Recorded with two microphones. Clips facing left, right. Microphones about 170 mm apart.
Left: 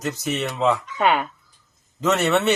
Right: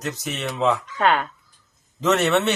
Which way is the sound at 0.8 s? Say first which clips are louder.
Even; 10° left (ahead or behind).